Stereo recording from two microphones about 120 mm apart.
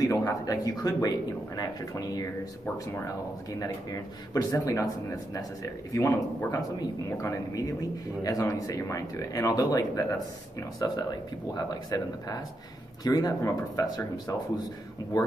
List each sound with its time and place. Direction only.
0.0 s speech: 30° left (ahead or behind)
4.3 s speech: 30° left (ahead or behind)
5.9 s speech: 25° left (ahead or behind)